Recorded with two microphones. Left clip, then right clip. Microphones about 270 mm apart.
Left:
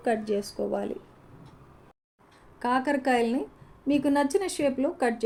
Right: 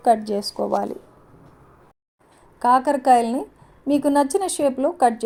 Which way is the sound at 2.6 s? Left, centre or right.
Right.